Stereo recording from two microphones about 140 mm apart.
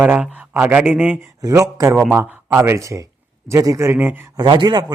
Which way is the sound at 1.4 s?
25° right (ahead or behind).